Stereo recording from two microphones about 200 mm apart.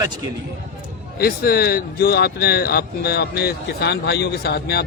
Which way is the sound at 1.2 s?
50° left (ahead or behind).